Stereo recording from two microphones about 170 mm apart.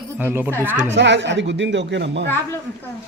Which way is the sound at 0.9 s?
90° right.